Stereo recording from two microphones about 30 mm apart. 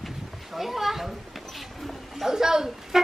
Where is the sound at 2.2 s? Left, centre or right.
Centre.